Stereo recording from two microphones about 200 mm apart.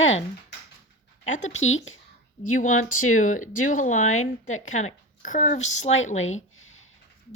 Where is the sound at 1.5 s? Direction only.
80° left.